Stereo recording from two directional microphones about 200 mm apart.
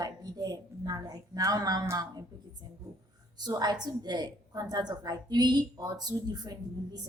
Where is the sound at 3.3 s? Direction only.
20° right (ahead or behind).